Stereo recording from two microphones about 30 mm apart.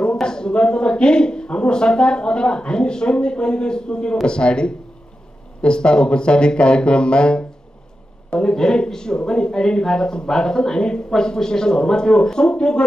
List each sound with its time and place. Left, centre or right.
0.0 s speech: left